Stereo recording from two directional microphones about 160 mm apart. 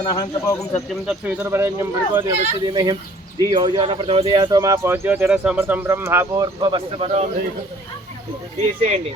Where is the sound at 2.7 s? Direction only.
25° right (ahead or behind).